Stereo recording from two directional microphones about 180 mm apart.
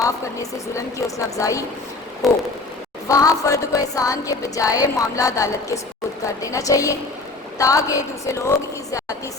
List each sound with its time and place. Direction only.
0.0 s a woman's voice: 15° left (ahead or behind)
2.2 s a sound: centre (ahead or behind)
3.1 s music: 20° left (ahead or behind)
7.6 s a woman's voice: 20° left (ahead or behind)